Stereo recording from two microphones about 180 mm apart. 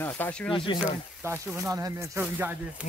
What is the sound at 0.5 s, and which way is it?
Speech, 25° left (ahead or behind).